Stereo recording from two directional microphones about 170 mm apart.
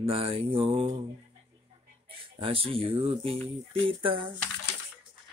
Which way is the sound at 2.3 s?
35° right (ahead or behind).